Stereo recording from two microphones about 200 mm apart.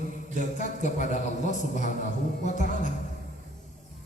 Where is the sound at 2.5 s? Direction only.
40° left (ahead or behind).